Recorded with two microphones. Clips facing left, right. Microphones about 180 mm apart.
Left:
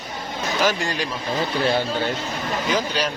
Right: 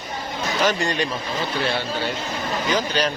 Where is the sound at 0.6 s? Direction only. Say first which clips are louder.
Right 1 dB; 5° left (ahead or behind).